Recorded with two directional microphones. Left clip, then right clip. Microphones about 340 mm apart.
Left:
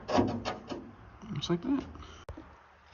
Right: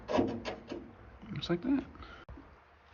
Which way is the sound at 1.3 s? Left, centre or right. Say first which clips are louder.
Left 1 dB; centre.